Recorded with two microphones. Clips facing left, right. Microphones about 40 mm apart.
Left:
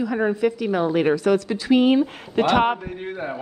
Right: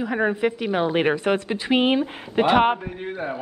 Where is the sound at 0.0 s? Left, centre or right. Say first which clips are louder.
Left 1 dB; right.